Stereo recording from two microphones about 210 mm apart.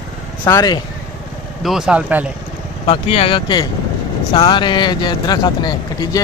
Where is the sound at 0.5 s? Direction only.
15° left (ahead or behind).